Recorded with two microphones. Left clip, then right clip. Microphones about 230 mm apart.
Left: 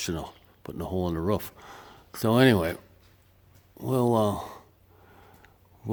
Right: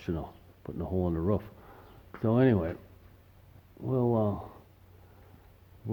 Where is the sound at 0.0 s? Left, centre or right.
Left.